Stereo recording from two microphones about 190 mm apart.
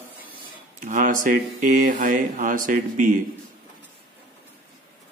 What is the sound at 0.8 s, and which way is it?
Speech, 45° right (ahead or behind).